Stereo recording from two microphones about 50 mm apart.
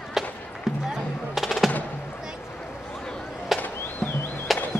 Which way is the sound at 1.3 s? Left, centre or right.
Centre.